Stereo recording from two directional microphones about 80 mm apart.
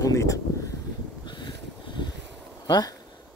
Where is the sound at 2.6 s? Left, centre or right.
Left.